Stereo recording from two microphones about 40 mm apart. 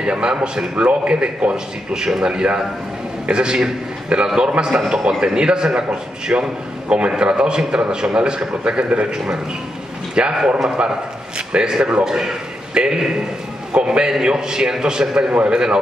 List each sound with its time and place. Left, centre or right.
0.0 s a man's voice: right
2.0 s a man's voice: centre
6.3 s a man's voice: right
6.9 s a man's voice: right
11.3 s a man's voice: right